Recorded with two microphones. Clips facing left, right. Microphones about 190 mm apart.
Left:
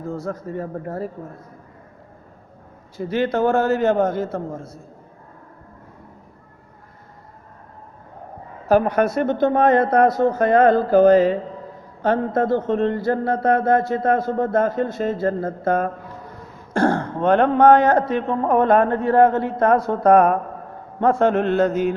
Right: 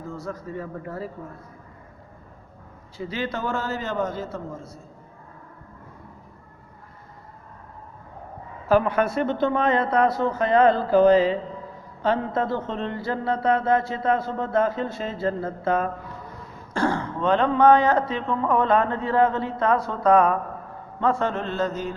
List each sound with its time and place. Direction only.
0.1 s speech: 50° left (ahead or behind)
3.0 s a man's voice: 50° left (ahead or behind)
8.6 s a man's voice: 45° left (ahead or behind); by 21.9 s 60° left (ahead or behind)